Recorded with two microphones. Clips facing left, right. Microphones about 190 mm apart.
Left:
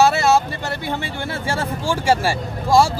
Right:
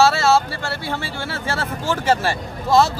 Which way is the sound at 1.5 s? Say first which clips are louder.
Left 1 dB; 15° left (ahead or behind).